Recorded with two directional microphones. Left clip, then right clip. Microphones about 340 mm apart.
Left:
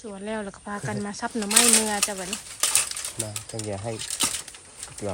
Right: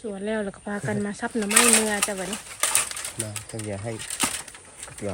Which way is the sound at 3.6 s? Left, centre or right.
Left.